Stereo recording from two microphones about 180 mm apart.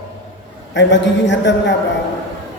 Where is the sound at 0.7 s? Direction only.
80° left.